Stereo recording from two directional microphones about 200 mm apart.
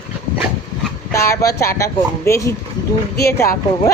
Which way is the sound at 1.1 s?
15° left (ahead or behind).